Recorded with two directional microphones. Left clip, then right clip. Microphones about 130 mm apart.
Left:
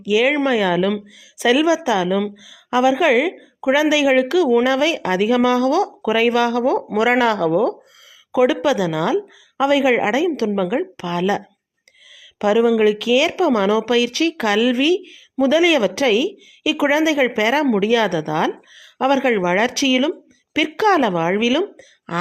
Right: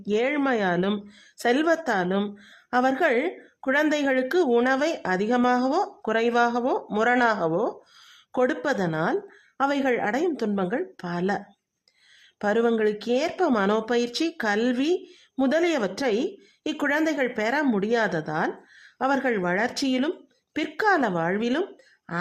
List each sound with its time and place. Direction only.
0.0 s speech: 10° left (ahead or behind)
12.4 s speech: 10° left (ahead or behind)